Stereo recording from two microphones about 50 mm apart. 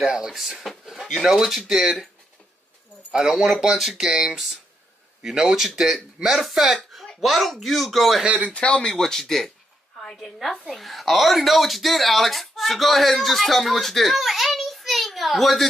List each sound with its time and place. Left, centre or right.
0.0 s speech: centre
0.7 s a sound: centre
1.2 s speech: centre
3.1 s speech: centre
8.5 s speech: left
8.8 s speech: centre